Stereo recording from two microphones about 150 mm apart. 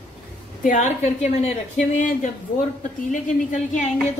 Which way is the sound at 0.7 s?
55° left (ahead or behind).